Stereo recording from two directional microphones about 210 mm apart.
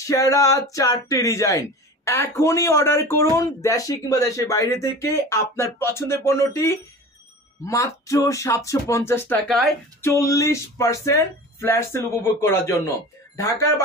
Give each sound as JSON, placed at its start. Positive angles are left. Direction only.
{"t": 0.0, "sound": "speech", "side_deg": 15}